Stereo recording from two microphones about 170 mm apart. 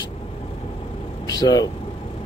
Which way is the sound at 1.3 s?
20° left (ahead or behind).